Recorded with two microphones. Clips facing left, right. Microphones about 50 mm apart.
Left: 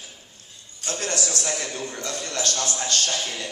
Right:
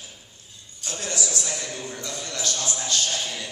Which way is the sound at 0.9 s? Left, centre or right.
Left.